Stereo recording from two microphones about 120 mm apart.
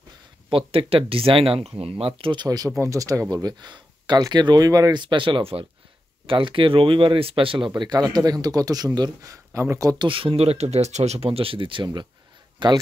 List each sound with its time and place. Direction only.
0.5 s speech: 50° right (ahead or behind); by 9.9 s 25° right (ahead or behind)
9.9 s speech: 45° right (ahead or behind)